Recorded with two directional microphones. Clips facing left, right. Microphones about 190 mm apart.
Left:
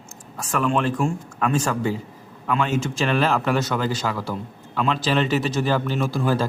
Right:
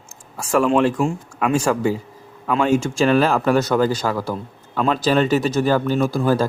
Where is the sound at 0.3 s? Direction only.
10° right (ahead or behind).